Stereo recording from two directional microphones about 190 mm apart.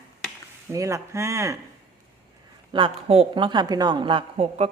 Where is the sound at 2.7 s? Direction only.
30° right (ahead or behind).